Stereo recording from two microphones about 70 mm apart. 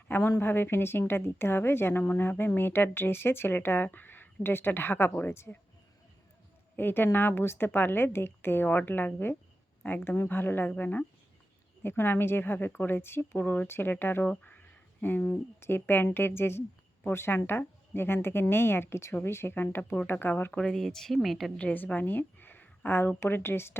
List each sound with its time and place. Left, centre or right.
0.1 s a woman's voice: left
6.7 s a woman's voice: left
11.8 s a woman's voice: left
20.5 s speech: centre
21.5 s a woman's voice: left